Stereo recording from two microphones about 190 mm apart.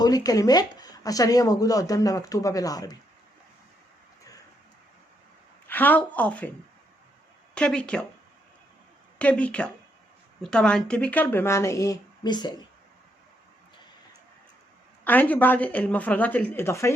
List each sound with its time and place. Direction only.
0.0 s speech: 20° left (ahead or behind)
5.6 s speech: 10° left (ahead or behind)
7.5 s speech: 5° left (ahead or behind)
9.1 s speech: 5° left (ahead or behind); by 12.5 s 20° left (ahead or behind)
15.0 s speech: 10° left (ahead or behind)